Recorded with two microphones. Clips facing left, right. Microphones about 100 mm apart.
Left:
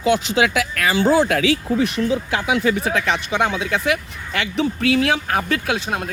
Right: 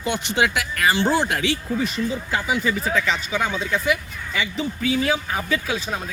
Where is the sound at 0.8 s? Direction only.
90° left.